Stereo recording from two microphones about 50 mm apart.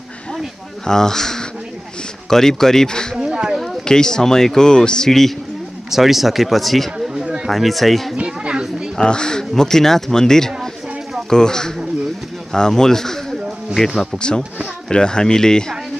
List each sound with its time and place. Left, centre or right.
0.8 s speech: centre
3.2 s a sound: centre
3.8 s speech: centre
5.9 s speech: centre
8.3 s a sound: centre
8.9 s speech: centre
14.1 s speech: centre